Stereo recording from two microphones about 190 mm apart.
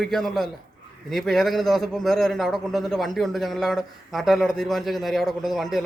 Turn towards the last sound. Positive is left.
turn(degrees=0)  # may be behind; listen again after turning